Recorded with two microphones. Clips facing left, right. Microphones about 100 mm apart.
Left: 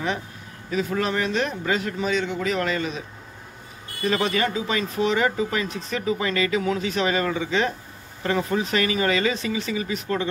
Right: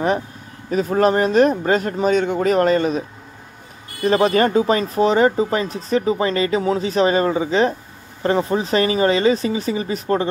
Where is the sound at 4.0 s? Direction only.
40° right (ahead or behind).